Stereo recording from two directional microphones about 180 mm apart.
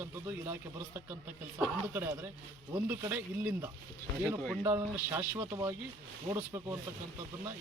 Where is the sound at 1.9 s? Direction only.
10° right (ahead or behind).